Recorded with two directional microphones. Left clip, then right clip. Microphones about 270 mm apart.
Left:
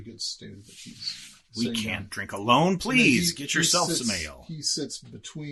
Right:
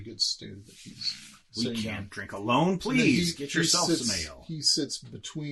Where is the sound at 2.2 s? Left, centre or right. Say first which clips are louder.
Left 5 dB; left.